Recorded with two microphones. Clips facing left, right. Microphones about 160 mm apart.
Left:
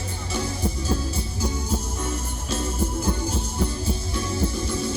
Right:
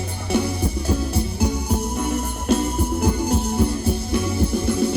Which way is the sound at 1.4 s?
60° right (ahead or behind).